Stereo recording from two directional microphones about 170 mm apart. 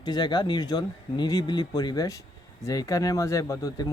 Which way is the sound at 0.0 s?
25° left (ahead or behind).